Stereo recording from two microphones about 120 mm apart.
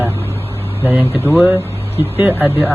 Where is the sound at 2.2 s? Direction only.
15° right (ahead or behind).